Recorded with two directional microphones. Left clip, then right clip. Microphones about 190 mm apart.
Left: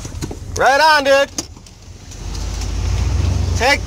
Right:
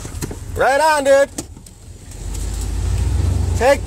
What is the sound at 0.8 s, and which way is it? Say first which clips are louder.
Speech: even; 25° right (ahead or behind).